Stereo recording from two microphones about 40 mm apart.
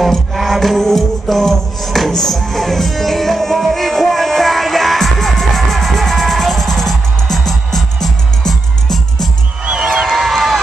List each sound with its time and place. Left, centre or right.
0.0 s music: centre
9.7 s music: centre
10.0 s a sound: centre